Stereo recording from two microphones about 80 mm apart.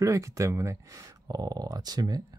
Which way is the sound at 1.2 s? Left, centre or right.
Right.